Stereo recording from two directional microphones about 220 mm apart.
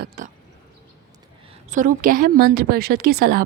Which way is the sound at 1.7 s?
35° right (ahead or behind).